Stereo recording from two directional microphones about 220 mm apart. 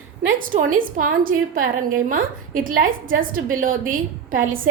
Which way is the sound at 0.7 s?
40° right (ahead or behind).